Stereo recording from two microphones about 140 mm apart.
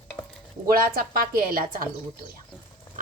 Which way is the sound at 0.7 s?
90° right.